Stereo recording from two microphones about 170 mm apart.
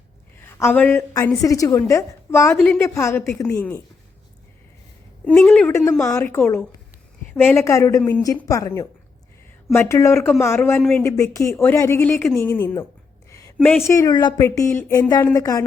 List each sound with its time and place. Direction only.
0.4 s a woman's voice: 10° left (ahead or behind)
5.2 s a woman's voice: 5° left (ahead or behind)
11.0 s a woman's voice: 15° left (ahead or behind)
13.3 s a sound: 20° left (ahead or behind)
13.8 s speech: 20° left (ahead or behind)